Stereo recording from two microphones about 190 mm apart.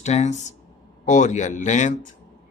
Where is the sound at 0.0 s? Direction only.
35° left (ahead or behind).